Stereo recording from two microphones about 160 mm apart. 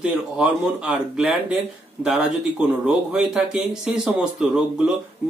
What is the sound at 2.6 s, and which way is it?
Speech, 5° right (ahead or behind).